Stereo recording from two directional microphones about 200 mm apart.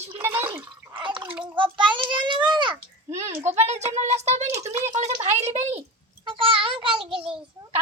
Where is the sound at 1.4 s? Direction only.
25° right (ahead or behind).